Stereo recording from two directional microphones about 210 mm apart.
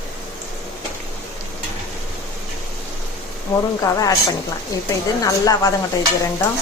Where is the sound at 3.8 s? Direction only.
15° left (ahead or behind).